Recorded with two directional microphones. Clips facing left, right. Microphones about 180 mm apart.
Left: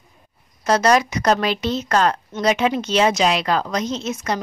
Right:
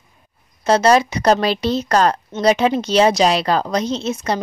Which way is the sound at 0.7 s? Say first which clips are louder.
Right 3 dB; 30° right (ahead or behind).